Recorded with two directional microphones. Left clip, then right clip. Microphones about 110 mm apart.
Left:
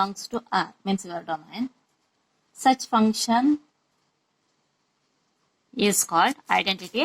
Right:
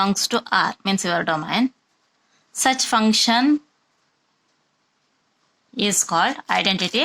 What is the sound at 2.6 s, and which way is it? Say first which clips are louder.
Speech: right 2 dB; 60° right (ahead or behind).